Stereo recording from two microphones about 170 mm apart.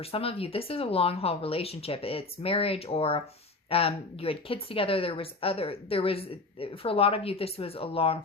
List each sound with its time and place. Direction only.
0.0 s a woman's voice: 35° left (ahead or behind)